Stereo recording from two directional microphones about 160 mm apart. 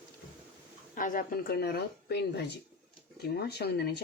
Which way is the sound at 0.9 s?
55° left (ahead or behind).